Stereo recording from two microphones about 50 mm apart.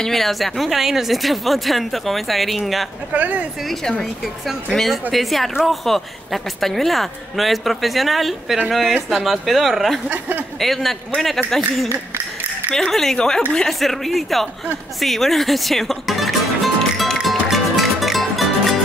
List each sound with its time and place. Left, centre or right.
0.0 s a woman's voice: centre
3.1 s speech: right
4.7 s a woman's voice: centre
15.0 s music: centre